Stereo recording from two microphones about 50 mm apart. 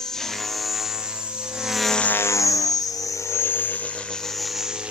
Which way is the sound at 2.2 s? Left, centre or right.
Left.